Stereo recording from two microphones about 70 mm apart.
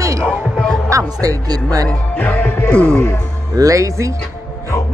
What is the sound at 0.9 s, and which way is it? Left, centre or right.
Music, right.